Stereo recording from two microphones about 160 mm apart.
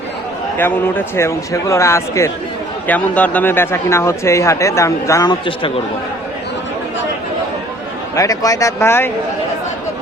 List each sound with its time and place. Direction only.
0.6 s speech: 15° left (ahead or behind); by 5.7 s 30° left (ahead or behind)
8.1 s speech: 20° left (ahead or behind)